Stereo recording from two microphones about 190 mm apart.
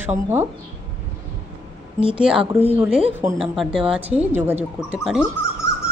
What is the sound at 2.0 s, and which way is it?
Speech, 25° right (ahead or behind).